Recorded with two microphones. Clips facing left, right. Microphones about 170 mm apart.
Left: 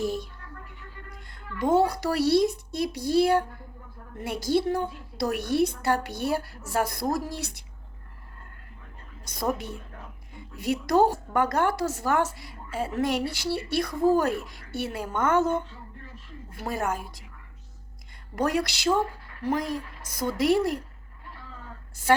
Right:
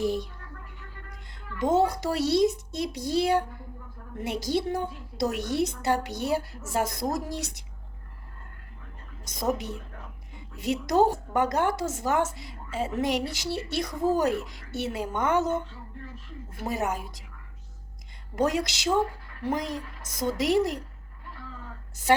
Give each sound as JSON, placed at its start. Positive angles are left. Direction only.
{"t": 0.0, "sound": "music", "side_deg": -15}
{"t": 1.3, "sound": "a woman's voice", "side_deg": -20}
{"t": 9.3, "sound": "a woman's voice", "side_deg": -20}
{"t": 18.3, "sound": "a woman's voice", "side_deg": -20}